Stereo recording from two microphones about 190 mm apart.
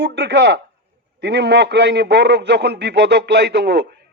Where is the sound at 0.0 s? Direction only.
60° right (ahead or behind).